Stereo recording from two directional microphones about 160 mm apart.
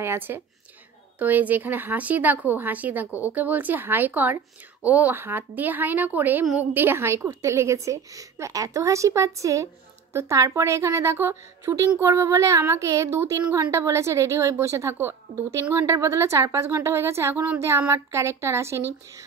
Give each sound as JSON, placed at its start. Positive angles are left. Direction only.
{"t": 0.0, "sound": "a woman's voice", "side_deg": -15}
{"t": 3.1, "sound": "speech", "side_deg": 15}
{"t": 3.3, "sound": "a woman's voice", "side_deg": -10}